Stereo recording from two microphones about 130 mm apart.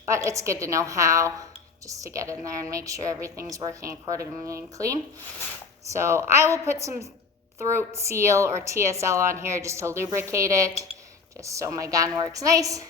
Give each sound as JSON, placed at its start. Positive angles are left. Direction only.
{"t": 0.1, "sound": "a woman's voice", "side_deg": -25}